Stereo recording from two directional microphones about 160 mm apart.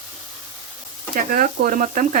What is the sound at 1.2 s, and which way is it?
Speech, 60° right (ahead or behind).